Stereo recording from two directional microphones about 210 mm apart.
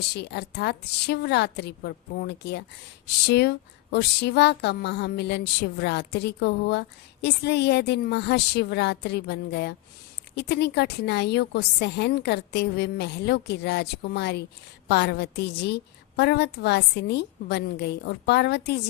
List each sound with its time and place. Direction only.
0.1 s a woman's voice: 55° left (ahead or behind)